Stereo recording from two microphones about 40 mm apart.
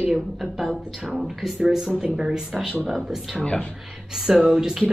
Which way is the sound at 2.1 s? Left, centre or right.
Right.